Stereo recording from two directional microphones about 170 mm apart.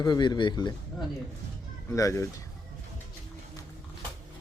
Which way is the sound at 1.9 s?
20° left (ahead or behind).